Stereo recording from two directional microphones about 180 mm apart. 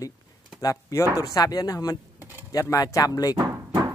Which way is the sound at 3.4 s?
20° right (ahead or behind).